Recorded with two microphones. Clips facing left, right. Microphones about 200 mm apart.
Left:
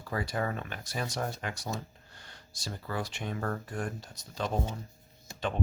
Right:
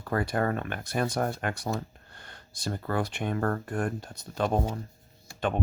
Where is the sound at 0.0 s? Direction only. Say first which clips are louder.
Right 5 dB; 55° right (ahead or behind).